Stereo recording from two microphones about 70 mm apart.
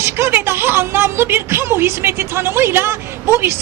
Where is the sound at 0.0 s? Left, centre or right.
Right.